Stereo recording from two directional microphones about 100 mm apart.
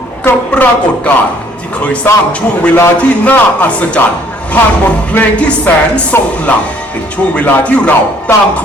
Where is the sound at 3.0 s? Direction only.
15° left (ahead or behind).